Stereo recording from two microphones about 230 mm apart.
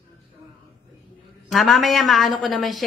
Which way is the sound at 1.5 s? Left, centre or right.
Centre.